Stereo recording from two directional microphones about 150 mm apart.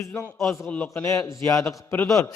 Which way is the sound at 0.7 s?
10° left (ahead or behind).